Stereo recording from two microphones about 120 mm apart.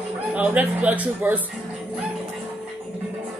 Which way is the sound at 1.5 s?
Centre (ahead or behind).